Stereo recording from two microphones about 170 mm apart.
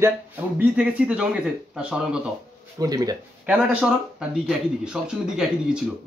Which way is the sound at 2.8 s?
20° right (ahead or behind).